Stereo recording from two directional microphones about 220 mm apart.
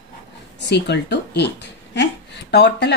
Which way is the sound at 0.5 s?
50° left (ahead or behind).